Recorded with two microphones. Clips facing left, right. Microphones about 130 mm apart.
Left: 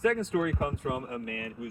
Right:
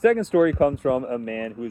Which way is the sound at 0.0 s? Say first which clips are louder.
Right 10 dB; 90° right.